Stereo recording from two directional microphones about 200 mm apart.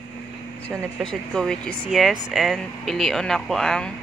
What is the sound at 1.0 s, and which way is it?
Speech, 5° left (ahead or behind).